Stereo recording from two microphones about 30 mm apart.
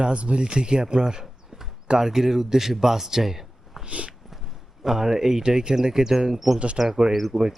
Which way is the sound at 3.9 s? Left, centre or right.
Right.